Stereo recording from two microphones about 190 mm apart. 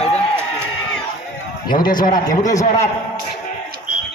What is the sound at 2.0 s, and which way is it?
Speech, 40° left (ahead or behind).